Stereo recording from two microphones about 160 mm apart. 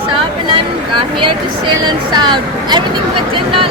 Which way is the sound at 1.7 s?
25° right (ahead or behind).